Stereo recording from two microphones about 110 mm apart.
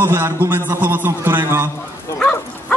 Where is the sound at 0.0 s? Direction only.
20° right (ahead or behind).